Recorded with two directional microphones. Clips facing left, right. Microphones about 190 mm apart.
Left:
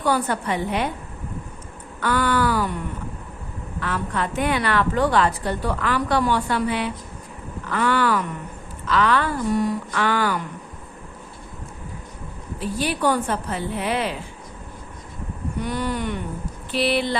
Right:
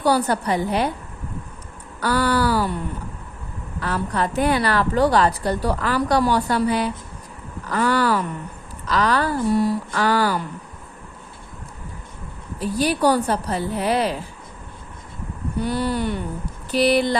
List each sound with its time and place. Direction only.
0.0 s a woman's voice: 35° right (ahead or behind)
2.0 s a woman's voice: 35° right (ahead or behind)
3.8 s a woman's voice: 35° right (ahead or behind)
12.5 s a woman's voice: 40° right (ahead or behind)
15.5 s a woman's voice: 30° right (ahead or behind)